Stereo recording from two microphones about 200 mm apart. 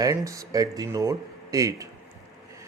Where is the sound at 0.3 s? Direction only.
15° right (ahead or behind).